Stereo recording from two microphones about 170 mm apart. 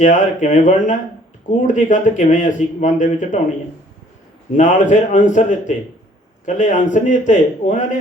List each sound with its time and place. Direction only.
0.0 s speech: 45° left (ahead or behind)
4.5 s speech: 45° left (ahead or behind)